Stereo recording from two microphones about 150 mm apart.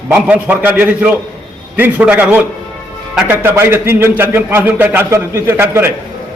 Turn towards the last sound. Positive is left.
turn(degrees=-15)  # may be behind; listen again after turning